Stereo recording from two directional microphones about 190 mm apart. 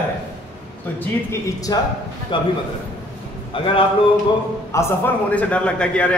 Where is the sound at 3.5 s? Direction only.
30° left (ahead or behind).